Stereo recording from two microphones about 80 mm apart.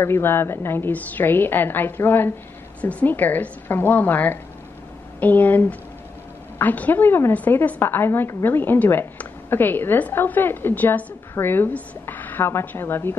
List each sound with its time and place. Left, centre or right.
0.0 s a woman's voice: left